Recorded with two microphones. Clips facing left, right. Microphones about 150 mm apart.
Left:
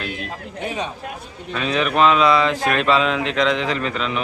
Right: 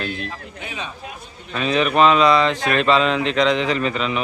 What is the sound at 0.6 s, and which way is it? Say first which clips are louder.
Speech: left 7 dB; 40° left (ahead or behind).